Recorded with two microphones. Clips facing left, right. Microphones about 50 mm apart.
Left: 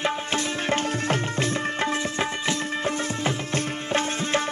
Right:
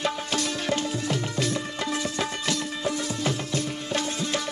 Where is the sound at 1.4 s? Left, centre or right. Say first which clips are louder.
Left 3 dB; left.